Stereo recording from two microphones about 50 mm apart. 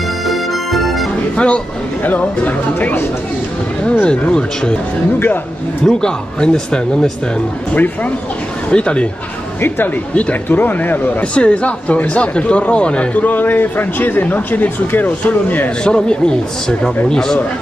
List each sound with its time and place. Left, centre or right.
0.3 s music: centre
1.3 s speech: left
4.0 s speech: left
5.9 s speech: centre
7.7 s speech: left
8.6 s speech: left
10.1 s speech: left
10.6 s speech: left
11.3 s speech: left
15.8 s speech: centre